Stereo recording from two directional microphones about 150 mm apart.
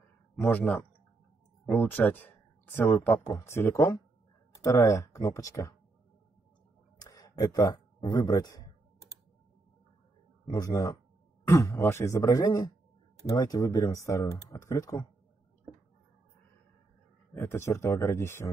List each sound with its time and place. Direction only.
0.4 s speech: 10° left (ahead or behind)
7.0 s speech: 25° left (ahead or behind)
10.4 s speech: 25° left (ahead or behind)
17.3 s speech: 15° left (ahead or behind)